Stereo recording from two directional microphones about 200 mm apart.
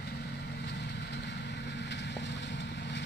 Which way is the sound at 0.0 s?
55° left (ahead or behind).